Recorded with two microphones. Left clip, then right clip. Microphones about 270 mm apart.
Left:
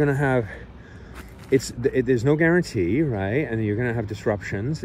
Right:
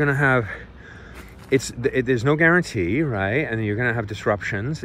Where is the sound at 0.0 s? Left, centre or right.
Right.